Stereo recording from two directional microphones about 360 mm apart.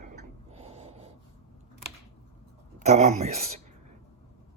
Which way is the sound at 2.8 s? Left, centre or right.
Centre.